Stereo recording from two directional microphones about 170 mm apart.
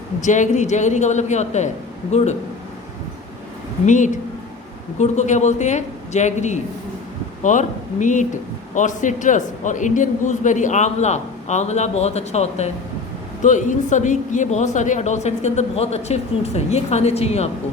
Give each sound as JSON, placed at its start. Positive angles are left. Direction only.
{"t": 0.2, "sound": "a woman's voice", "side_deg": 45}
{"t": 3.8, "sound": "a woman's voice", "side_deg": 45}